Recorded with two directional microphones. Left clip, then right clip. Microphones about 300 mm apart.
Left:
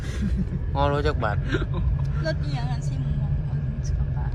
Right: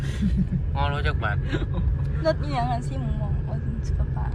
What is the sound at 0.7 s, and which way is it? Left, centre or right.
Speech, centre.